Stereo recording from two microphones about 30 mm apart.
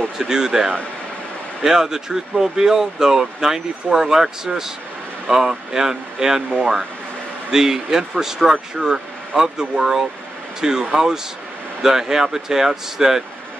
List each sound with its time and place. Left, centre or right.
0.2 s speech: right
7.5 s speech: centre